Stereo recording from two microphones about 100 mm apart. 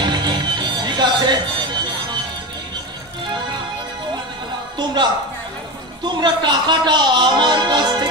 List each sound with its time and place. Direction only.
0.0 s music: 45° right (ahead or behind)
4.7 s music: 50° right (ahead or behind)
6.0 s speech: 50° right (ahead or behind)